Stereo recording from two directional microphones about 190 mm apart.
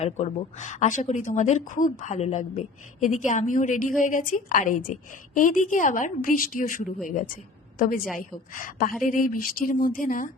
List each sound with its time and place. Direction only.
0.0 s a woman's voice: 35° left (ahead or behind)